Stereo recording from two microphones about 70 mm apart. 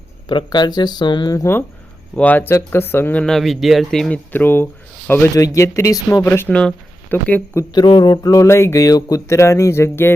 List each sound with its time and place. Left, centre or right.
0.5 s speech: left
2.1 s speech: left
3.2 s speech: centre
4.1 s speech: left
5.3 s speech: left
6.2 s speech: left
6.5 s speech: centre
7.1 s speech: left
7.7 s a sound: left
8.4 s speech: left
8.8 s speech: left
9.2 s speech: left